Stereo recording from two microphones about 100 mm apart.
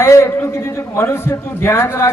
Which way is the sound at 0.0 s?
30° left (ahead or behind).